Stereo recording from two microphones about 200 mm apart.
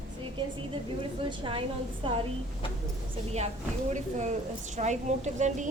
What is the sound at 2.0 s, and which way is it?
Speech, 25° right (ahead or behind).